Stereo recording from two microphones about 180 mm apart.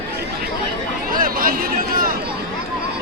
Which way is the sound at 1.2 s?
50° right (ahead or behind).